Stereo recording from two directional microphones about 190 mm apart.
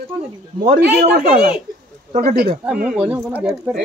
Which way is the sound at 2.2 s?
50° right (ahead or behind).